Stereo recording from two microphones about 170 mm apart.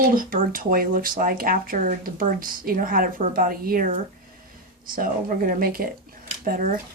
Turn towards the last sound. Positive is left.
turn(degrees=-60)  # may be behind; listen again after turning